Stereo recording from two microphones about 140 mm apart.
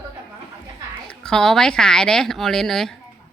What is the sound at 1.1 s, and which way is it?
A woman's voice, 5° left (ahead or behind).